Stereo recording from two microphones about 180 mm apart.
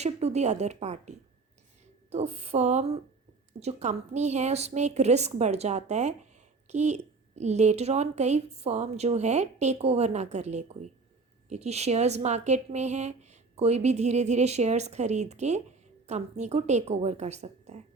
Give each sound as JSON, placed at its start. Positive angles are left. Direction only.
{"t": 0.0, "sound": "a woman's voice", "side_deg": -35}